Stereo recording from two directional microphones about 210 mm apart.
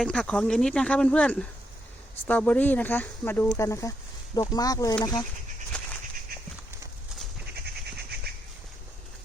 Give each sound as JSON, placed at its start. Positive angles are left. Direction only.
{"t": 0.0, "sound": "speech", "side_deg": 5}
{"t": 5.7, "sound": "fowl", "side_deg": 5}